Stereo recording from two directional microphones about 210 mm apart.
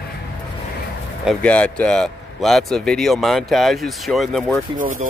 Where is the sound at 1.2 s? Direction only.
5° left (ahead or behind).